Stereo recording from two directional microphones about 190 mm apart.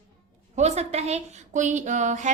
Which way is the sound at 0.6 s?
35° right (ahead or behind).